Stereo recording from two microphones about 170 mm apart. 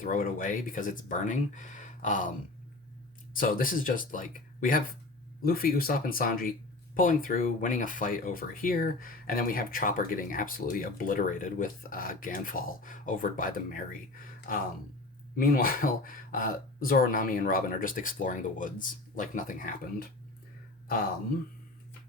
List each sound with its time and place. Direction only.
0.0 s speech: 55° left (ahead or behind)
3.3 s speech: 55° left (ahead or behind)